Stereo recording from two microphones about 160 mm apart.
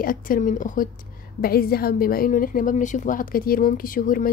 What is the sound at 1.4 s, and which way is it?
A woman's voice, 70° left (ahead or behind).